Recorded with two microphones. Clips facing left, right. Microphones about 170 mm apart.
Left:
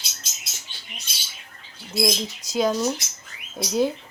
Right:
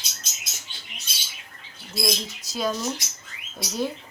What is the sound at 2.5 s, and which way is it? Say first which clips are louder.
Speech: left 5 dB; 20° left (ahead or behind).